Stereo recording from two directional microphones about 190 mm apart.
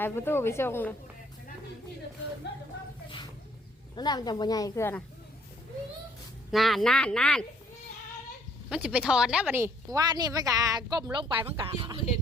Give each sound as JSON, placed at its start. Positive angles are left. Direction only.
{"t": 0.0, "sound": "a woman's voice", "side_deg": 10}
{"t": 3.9, "sound": "a woman's voice", "side_deg": 20}
{"t": 6.5, "sound": "speech", "side_deg": 0}
{"t": 8.7, "sound": "a woman's voice", "side_deg": -5}